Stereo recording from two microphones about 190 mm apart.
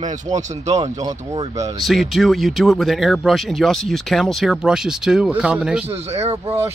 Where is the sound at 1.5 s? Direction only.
15° right (ahead or behind).